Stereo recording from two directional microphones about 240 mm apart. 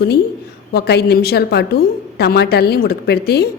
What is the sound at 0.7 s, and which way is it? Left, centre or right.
A woman's voice, left.